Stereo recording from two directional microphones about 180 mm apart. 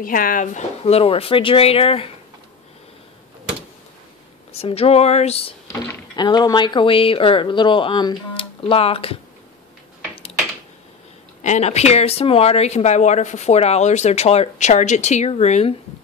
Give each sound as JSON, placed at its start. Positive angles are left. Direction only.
{"t": 0.0, "sound": "speech", "side_deg": 50}
{"t": 4.5, "sound": "speech", "side_deg": 35}
{"t": 5.7, "sound": "speech", "side_deg": 20}
{"t": 11.4, "sound": "speech", "side_deg": 40}